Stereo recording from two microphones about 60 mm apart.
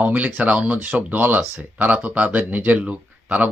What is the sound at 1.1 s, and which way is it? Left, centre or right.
Speech, right.